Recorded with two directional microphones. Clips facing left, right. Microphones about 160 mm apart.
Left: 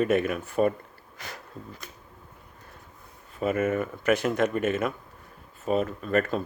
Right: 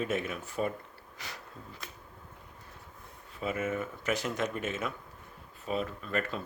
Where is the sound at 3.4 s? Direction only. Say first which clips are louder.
Left 7 dB; 55° left (ahead or behind).